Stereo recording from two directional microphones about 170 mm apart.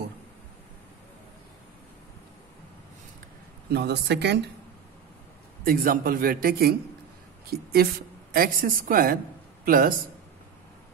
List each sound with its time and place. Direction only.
3.7 s speech: 80° right
5.6 s a woman's voice: 60° right (ahead or behind)